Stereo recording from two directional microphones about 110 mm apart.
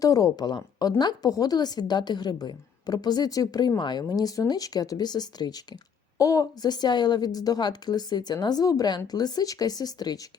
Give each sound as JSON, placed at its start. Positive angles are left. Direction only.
{"t": 0.0, "sound": "a woman's voice", "side_deg": 30}